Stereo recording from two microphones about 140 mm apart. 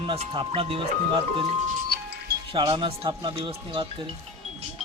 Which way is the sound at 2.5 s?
35° right (ahead or behind).